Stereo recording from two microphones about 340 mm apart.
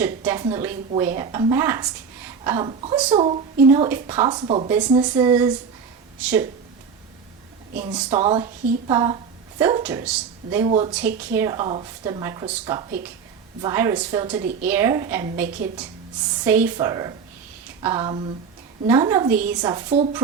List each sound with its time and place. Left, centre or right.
0.0 s a woman's voice: centre
7.9 s a woman's voice: centre
10.7 s a woman's voice: centre
10.9 s a woman's voice: centre
15.4 s a woman's voice: right
16.4 s a woman's voice: centre